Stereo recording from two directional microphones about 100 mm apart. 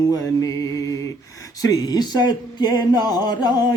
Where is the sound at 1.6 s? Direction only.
35° left (ahead or behind).